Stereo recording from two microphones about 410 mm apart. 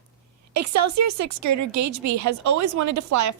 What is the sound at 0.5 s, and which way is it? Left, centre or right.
A woman's voice, right.